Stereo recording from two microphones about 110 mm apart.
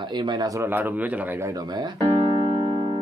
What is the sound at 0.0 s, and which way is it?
Speech, 45° right (ahead or behind).